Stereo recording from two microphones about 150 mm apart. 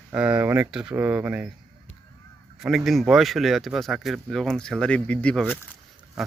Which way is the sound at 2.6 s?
Centre (ahead or behind).